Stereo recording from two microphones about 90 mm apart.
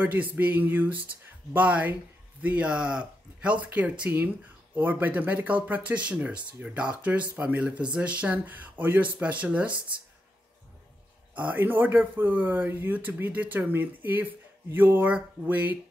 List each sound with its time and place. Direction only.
0.0 s speech: 20° right (ahead or behind)
11.3 s speech: 20° right (ahead or behind)